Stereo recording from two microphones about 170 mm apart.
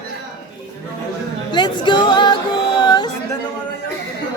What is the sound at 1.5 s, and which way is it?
Music, 25° left (ahead or behind).